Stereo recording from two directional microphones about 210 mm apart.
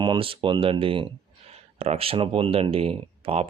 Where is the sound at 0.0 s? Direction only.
25° right (ahead or behind).